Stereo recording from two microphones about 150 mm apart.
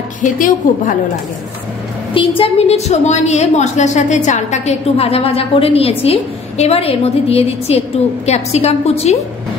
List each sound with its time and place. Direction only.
0.2 s a woman's voice: 60° left (ahead or behind)
2.1 s a woman's voice: 35° left (ahead or behind)